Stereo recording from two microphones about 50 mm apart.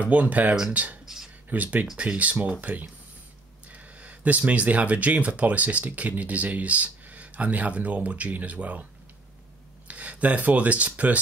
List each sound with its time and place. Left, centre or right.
0.0 s speech: right
1.0 s a sound: centre
1.5 s speech: right
9.8 s speech: right